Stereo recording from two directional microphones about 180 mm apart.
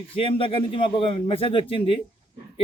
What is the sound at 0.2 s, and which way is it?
A man's voice, 30° left (ahead or behind).